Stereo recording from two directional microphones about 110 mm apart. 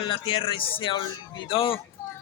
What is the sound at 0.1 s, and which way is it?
A man's voice, 50° left (ahead or behind).